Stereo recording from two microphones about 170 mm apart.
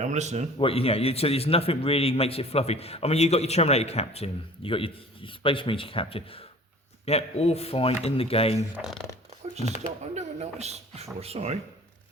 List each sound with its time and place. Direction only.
0.0 s speech: 45° right (ahead or behind)
0.6 s a man's voice: 35° left (ahead or behind)
8.7 s speech: centre (ahead or behind)
9.4 s shuffling cards: 40° right (ahead or behind)
10.2 s a man's voice: 40° right (ahead or behind)